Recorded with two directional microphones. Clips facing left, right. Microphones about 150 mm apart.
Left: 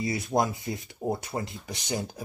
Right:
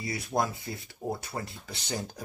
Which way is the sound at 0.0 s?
20° left (ahead or behind).